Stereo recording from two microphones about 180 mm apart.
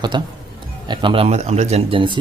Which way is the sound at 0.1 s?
25° right (ahead or behind).